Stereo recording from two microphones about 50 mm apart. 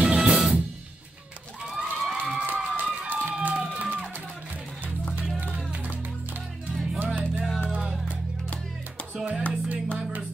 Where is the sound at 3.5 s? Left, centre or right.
Centre.